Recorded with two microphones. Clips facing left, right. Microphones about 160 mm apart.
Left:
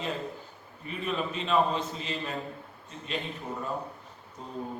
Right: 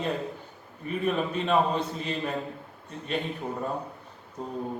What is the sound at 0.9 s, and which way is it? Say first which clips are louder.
A man's voice: right 5 dB; 50° right (ahead or behind).